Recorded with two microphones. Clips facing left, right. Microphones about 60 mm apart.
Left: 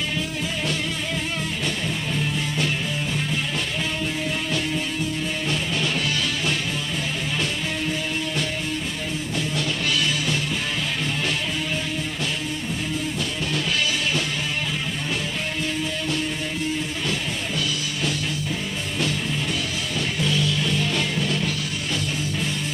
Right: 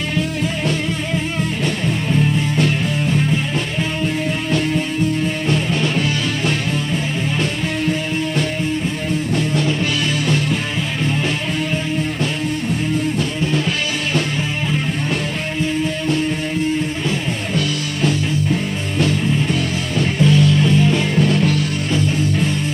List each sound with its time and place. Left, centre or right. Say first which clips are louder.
2.5 s music: right 7 dB; right
5.5 s music: right 6 dB; right
17.6 s music: right 8 dB; right
20.6 s music: right 9 dB; right
21.2 s music: right 9 dB; right